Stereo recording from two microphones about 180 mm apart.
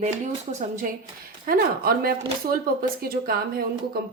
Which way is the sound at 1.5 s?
55° right (ahead or behind).